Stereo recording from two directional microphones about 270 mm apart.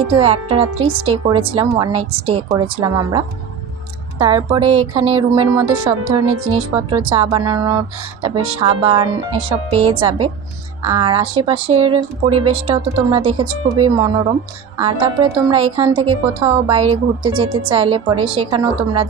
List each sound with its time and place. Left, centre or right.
0.2 s a woman's voice: right